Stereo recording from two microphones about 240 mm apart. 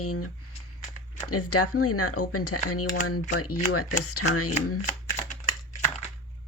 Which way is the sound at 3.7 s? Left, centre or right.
Left.